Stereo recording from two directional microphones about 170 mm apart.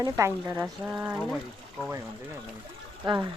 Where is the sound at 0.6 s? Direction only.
5° right (ahead or behind).